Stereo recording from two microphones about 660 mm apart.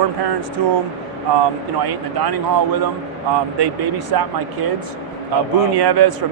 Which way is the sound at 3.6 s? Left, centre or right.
Right.